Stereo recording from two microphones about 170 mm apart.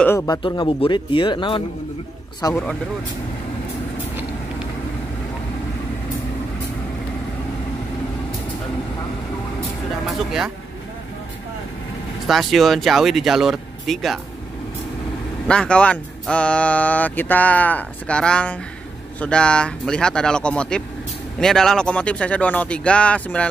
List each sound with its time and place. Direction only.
0.3 s speech: 25° left (ahead or behind)
10.0 s speech: centre (ahead or behind)
12.3 s speech: centre (ahead or behind)
15.4 s speech: 5° left (ahead or behind)